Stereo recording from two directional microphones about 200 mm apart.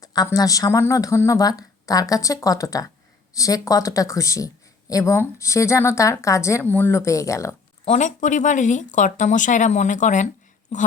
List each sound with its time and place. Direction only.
0.0 s speech: 20° left (ahead or behind)
7.9 s speech: 35° left (ahead or behind)